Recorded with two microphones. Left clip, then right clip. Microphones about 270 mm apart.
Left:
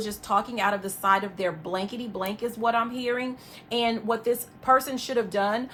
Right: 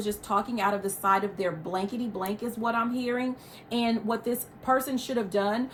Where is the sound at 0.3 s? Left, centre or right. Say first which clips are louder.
Left 3 dB; left.